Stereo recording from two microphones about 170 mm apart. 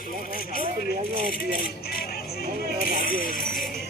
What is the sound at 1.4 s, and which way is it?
Speech, 60° left (ahead or behind).